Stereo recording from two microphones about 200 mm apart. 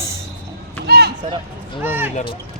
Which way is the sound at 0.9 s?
50° right (ahead or behind).